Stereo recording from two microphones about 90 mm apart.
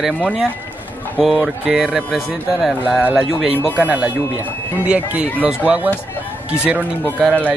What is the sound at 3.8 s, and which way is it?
Speech, 20° right (ahead or behind).